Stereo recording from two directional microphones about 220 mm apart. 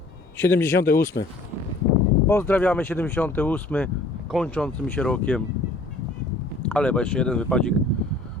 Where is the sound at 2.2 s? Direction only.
10° left (ahead or behind).